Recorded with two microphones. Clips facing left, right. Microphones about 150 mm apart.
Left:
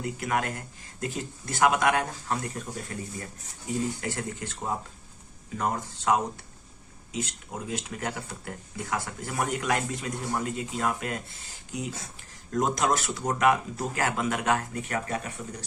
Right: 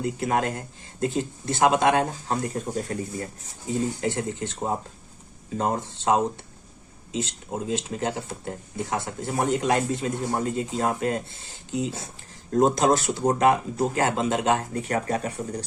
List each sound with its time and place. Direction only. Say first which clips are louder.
0.0 s speech: right 4 dB; 30° right (ahead or behind)
4.0 s speech: right 6 dB; 25° right (ahead or behind)